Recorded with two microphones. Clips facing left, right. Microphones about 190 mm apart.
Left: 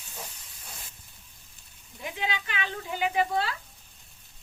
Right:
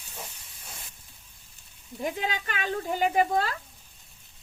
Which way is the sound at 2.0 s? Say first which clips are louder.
Right 3 dB; 40° right (ahead or behind).